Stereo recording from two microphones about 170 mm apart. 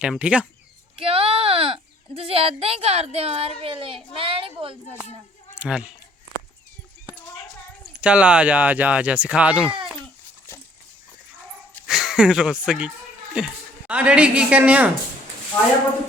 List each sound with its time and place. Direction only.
0.0 s speech: 5° right (ahead or behind)
0.9 s speech: 35° right (ahead or behind)
4.1 s a sound: 30° right (ahead or behind)
5.5 s speech: 5° right (ahead or behind)
7.9 s speech: 5° right (ahead or behind)
11.9 s a woman's voice: 5° right (ahead or behind)